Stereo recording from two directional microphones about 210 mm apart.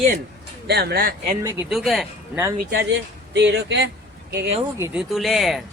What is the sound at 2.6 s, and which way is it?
Speech, 55° right (ahead or behind).